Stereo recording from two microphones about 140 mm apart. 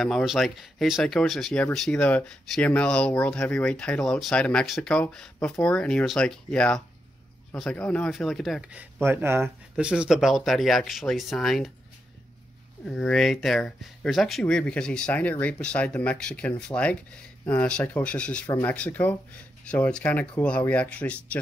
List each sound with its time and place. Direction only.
0.0 s speech: centre (ahead or behind)
9.0 s speech: 15° right (ahead or behind)
9.8 s speech: 5° right (ahead or behind)
12.8 s speech: 5° left (ahead or behind)